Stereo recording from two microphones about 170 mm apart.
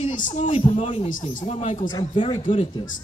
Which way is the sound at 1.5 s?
45° left (ahead or behind).